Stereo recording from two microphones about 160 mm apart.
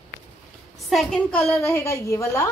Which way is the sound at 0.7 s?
Centre (ahead or behind).